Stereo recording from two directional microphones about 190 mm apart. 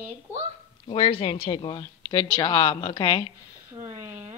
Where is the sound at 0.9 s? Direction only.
30° left (ahead or behind).